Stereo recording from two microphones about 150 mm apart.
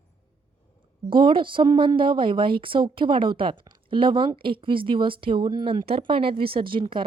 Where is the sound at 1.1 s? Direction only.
35° right (ahead or behind).